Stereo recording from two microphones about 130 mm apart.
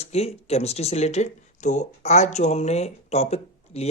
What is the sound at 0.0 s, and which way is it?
Speech, 55° left (ahead or behind).